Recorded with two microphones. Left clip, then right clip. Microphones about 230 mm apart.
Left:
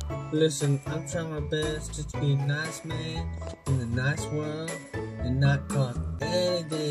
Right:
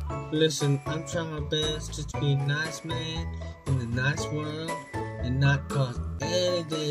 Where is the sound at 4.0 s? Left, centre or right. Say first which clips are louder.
Right 2 dB; centre.